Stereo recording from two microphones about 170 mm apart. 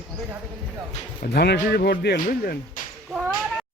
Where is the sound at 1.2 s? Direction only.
70° left (ahead or behind).